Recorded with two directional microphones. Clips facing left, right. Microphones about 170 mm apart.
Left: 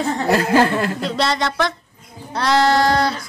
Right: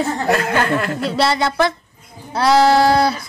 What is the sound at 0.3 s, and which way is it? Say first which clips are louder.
Speech: left 3 dB; 35° left (ahead or behind).